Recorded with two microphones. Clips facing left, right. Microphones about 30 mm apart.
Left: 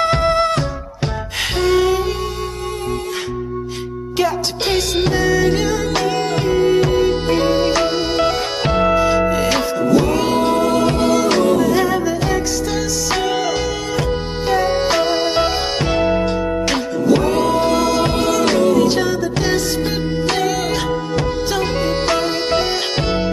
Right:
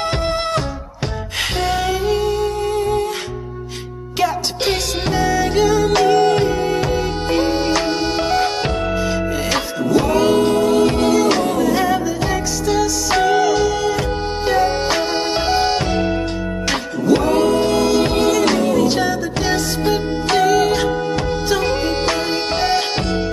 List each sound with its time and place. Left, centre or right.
0.0 s music: centre
1.6 s music: centre
4.2 s music: centre
8.7 s music: centre
15.9 s music: centre
16.6 s music: centre